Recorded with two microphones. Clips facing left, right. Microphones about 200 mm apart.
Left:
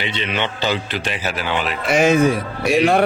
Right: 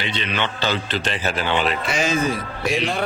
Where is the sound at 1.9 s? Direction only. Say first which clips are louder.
Left 11 dB; 55° left (ahead or behind).